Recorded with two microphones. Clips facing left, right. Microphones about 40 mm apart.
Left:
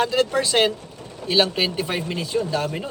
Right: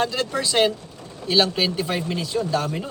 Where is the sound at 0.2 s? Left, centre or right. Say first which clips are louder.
Left 2 dB; left; by 2.1 s centre.